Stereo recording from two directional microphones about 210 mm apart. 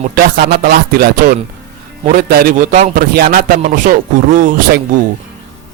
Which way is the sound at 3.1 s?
45° right (ahead or behind).